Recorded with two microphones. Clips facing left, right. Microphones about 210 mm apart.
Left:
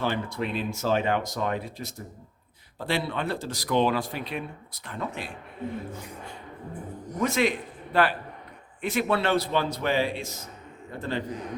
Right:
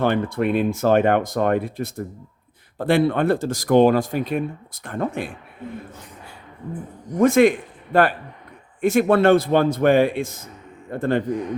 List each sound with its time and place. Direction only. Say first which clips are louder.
0.0 s speech: right 8 dB; 55° right (ahead or behind)
7.2 s a man's voice: right 10 dB; 50° right (ahead or behind)